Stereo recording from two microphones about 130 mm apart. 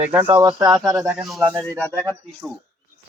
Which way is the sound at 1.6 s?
10° left (ahead or behind).